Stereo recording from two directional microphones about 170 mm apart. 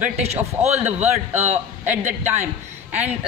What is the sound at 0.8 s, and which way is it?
Speech, 10° right (ahead or behind).